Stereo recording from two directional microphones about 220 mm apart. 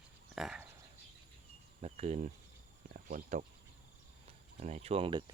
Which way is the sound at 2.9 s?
40° right (ahead or behind).